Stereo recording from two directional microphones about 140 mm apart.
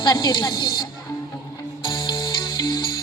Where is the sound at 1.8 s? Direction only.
30° left (ahead or behind).